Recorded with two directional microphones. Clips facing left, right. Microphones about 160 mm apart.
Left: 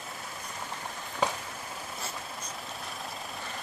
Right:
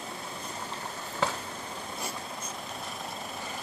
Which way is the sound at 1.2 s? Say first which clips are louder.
Left 1 dB; 15° left (ahead or behind).